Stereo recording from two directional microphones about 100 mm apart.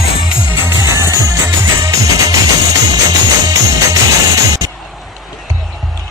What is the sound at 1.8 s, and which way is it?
Music, 35° right (ahead or behind).